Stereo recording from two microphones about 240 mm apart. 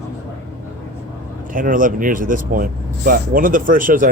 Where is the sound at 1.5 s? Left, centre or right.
Right.